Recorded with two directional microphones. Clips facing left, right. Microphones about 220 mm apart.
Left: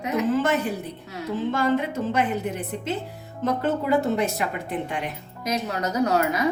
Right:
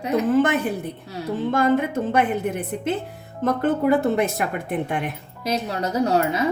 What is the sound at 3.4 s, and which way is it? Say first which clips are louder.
A woman's voice: right 4 dB; 55° right (ahead or behind).